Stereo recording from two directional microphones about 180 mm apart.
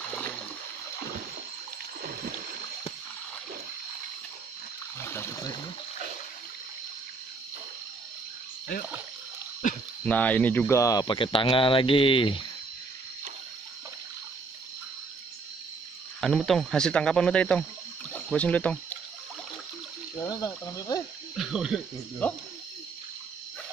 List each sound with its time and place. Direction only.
2.0 s a sound: 55° right (ahead or behind)
5.0 s a sound: 15° left (ahead or behind)
10.0 s speech: 10° left (ahead or behind); by 12.4 s 30° left (ahead or behind)
16.2 s speech: centre (ahead or behind)
20.2 s cricket: 20° left (ahead or behind)
21.4 s speech: 5° right (ahead or behind)
22.2 s speech: 10° left (ahead or behind)